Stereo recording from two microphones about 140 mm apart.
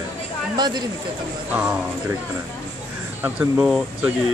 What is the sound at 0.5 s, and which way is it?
Speech, 30° right (ahead or behind).